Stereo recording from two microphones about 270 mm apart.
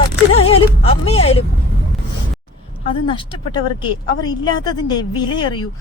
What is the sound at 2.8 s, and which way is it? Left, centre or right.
A woman's voice, centre.